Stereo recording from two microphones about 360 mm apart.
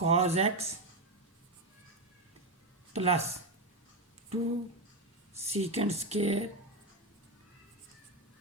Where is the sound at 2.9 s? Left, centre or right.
Centre.